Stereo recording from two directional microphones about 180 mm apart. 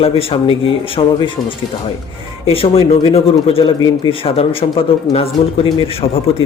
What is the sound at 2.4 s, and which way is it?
Speech, 30° left (ahead or behind).